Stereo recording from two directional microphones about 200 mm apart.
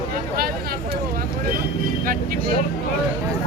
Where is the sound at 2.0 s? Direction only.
45° right (ahead or behind).